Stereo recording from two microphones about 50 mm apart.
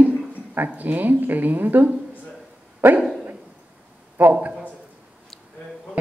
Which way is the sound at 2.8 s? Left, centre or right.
Right.